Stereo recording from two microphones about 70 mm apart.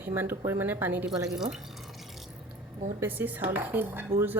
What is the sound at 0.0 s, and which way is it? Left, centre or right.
Speech, right.